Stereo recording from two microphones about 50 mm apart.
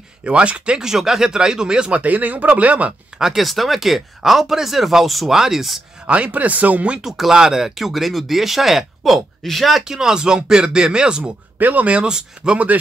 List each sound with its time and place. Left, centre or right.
0.2 s speech: right
0.8 s speech: centre; by 2.9 s right
3.2 s speech: centre
6.0 s speech: right
7.0 s speech: centre
9.9 s speech: centre
11.6 s speech: right